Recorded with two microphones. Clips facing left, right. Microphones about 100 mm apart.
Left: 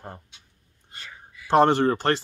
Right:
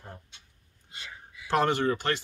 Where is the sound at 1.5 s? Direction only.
30° left (ahead or behind).